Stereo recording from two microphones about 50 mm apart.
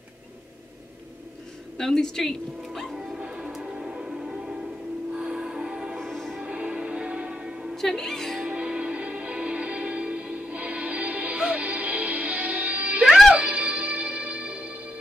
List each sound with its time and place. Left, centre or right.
1.8 s speech: centre
2.9 s music: centre
3.2 s music: right
5.9 s music: centre
6.4 s music: right
7.7 s music: centre
8.5 s music: right
13.0 s music: centre
13.3 s music: right